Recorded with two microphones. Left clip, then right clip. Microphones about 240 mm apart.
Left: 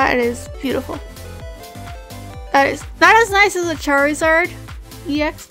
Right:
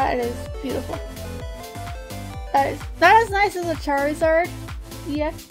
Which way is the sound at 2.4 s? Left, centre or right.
Left.